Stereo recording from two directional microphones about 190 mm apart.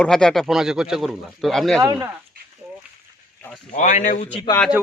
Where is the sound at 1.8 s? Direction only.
20° right (ahead or behind).